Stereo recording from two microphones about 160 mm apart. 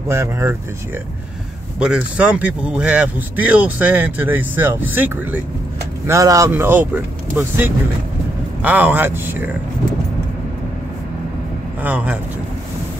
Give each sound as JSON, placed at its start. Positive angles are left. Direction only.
{"t": 0.1, "sound": "speech", "side_deg": -15}
{"t": 1.8, "sound": "speech", "side_deg": -5}
{"t": 11.8, "sound": "speech", "side_deg": -10}